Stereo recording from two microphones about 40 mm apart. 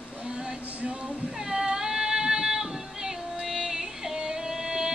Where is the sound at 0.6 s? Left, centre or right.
Right.